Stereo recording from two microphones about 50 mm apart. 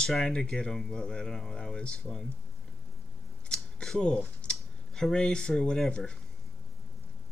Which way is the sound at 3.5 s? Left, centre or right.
Centre.